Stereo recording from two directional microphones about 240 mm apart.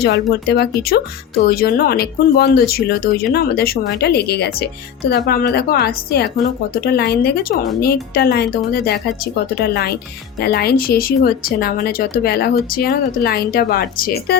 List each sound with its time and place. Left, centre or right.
0.0 s speech: left